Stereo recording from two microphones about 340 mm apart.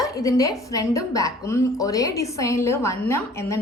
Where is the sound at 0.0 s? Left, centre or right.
Centre.